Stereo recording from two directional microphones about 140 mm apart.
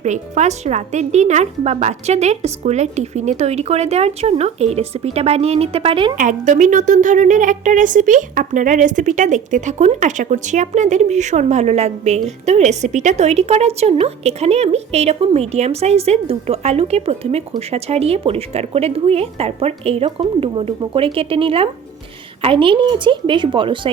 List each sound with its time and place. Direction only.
0.0 s speech: 55° right (ahead or behind)
6.1 s speech: 65° right (ahead or behind); by 23.9 s 35° right (ahead or behind)